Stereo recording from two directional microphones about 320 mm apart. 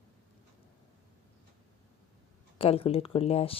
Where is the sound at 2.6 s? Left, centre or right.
Centre.